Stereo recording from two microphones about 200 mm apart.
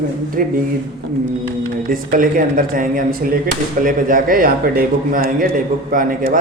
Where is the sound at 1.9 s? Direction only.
45° right (ahead or behind).